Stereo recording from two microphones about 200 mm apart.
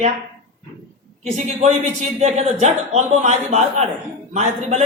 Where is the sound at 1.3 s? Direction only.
35° right (ahead or behind).